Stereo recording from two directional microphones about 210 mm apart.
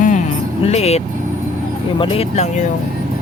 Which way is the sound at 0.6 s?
30° left (ahead or behind).